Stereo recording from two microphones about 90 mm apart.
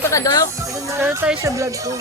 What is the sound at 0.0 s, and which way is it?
Speech, 35° left (ahead or behind).